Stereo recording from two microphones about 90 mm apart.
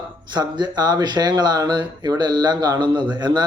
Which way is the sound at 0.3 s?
55° right (ahead or behind).